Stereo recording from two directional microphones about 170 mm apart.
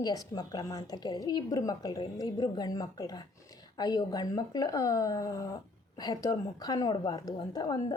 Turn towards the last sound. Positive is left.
turn(degrees=25)  # may be behind; listen again after turning